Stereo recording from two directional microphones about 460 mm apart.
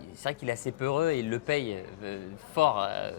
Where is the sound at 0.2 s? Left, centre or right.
Left.